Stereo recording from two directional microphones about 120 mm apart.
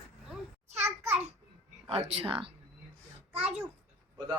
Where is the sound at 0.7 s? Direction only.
20° right (ahead or behind).